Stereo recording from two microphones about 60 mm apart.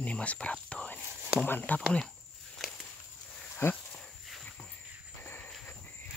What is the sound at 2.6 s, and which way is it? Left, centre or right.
Walk, centre.